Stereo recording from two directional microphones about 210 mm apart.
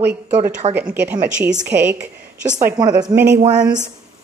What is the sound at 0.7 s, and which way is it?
Speech, 5° right (ahead or behind).